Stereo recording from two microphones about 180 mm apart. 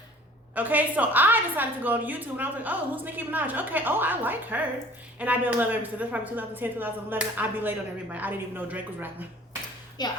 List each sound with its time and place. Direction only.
0.5 s a woman's voice: 10° right (ahead or behind)
10.0 s a woman's voice: 25° left (ahead or behind)